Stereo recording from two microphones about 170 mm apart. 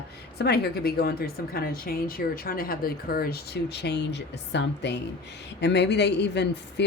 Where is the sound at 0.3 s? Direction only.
70° left (ahead or behind).